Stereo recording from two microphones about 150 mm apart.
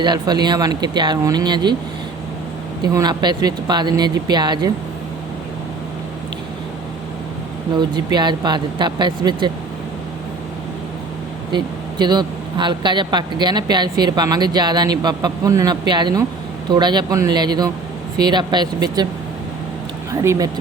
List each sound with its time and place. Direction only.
0.0 s speech: 30° right (ahead or behind)
2.8 s speech: 25° right (ahead or behind)
7.8 s speech: 30° right (ahead or behind)
11.5 s speech: 30° right (ahead or behind)
20.2 s speech: 20° right (ahead or behind)